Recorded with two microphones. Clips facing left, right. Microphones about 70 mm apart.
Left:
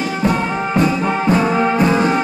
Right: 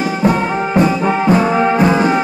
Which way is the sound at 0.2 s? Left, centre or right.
Right.